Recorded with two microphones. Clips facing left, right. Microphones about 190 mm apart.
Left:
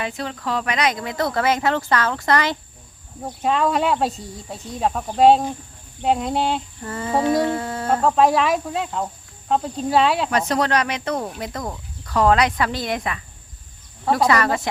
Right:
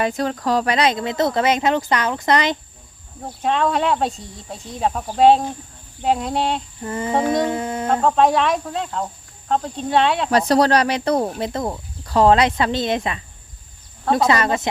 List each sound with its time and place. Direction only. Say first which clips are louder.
0.0 s speech: right 6 dB; 45° right (ahead or behind); by 2.6 s 20° right (ahead or behind)
3.4 s speech: even; centre (ahead or behind)
6.8 s speech: right 1 dB; 20° right (ahead or behind)
8.0 s speech: even; centre (ahead or behind)
10.3 s speech: right 5 dB; 35° right (ahead or behind)
14.3 s speech: right 1 dB; 20° right (ahead or behind)